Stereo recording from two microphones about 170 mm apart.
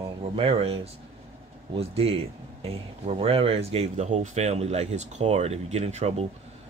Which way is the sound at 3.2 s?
35° right (ahead or behind).